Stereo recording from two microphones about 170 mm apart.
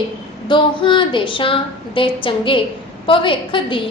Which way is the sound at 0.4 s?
30° left (ahead or behind).